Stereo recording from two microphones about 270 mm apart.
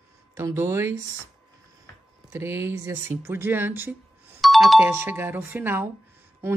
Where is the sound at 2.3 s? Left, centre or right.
Centre.